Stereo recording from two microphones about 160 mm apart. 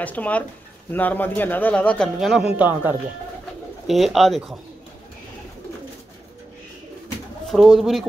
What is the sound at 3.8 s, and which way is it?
Speech, centre (ahead or behind).